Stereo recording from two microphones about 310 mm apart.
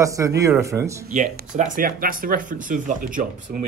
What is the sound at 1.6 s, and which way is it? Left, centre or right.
Speech, right.